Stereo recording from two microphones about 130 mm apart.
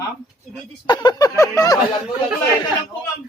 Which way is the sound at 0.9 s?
30° left (ahead or behind).